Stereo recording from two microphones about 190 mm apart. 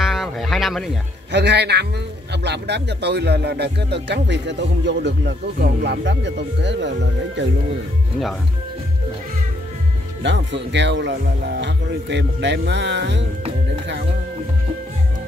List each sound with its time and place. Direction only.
0.0 s a sound: centre (ahead or behind)
1.3 s music: 65° right (ahead or behind)
10.2 s speech: 70° right (ahead or behind)